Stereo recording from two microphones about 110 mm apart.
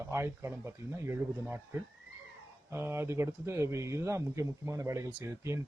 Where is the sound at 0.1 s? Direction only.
25° right (ahead or behind).